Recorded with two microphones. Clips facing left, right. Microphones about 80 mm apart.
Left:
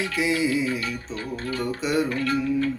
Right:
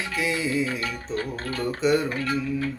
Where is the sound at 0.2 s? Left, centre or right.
Centre.